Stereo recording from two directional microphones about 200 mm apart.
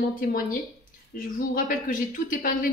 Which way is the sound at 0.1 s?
45° left (ahead or behind).